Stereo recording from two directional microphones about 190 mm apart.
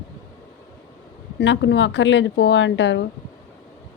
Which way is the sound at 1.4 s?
70° left (ahead or behind).